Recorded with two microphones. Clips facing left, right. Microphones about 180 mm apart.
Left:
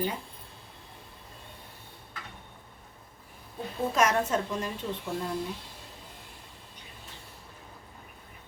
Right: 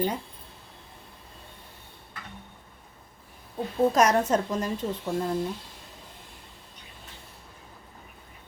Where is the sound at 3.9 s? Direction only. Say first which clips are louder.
Even; 40° right (ahead or behind).